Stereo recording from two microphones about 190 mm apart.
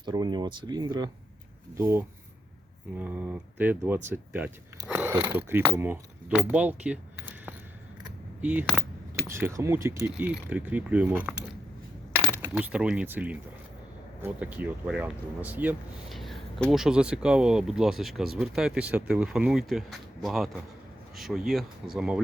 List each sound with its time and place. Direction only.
0.0 s speech: 20° right (ahead or behind)
6.5 s keys jangling: 10° right (ahead or behind)
8.4 s speech: 5° right (ahead or behind)
9.2 s speech: 15° right (ahead or behind)